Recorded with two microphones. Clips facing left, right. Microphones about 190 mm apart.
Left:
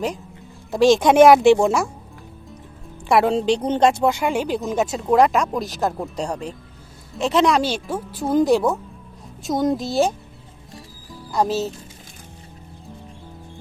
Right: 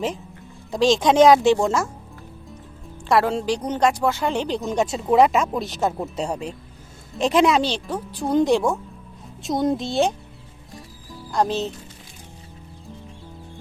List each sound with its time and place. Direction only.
0.7 s speech: 10° left (ahead or behind)
3.1 s a woman's voice: 20° left (ahead or behind); by 7.4 s 15° right (ahead or behind)
7.4 s speech: 5° left (ahead or behind)
11.1 s music: 5° left (ahead or behind)